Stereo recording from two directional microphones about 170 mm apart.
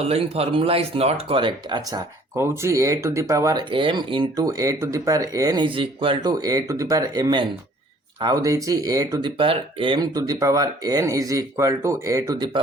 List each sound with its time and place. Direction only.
0.0 s speech: 35° right (ahead or behind)
2.3 s speech: 15° right (ahead or behind)
9.4 s speech: 30° right (ahead or behind)